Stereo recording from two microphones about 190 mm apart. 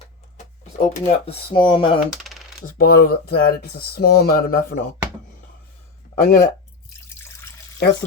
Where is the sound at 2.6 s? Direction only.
50° left (ahead or behind).